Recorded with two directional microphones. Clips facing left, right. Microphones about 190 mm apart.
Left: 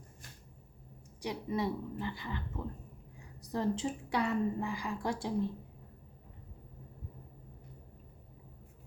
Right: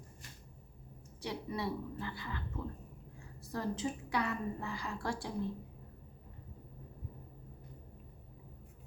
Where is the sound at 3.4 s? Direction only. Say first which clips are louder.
Left 4 dB; 20° left (ahead or behind).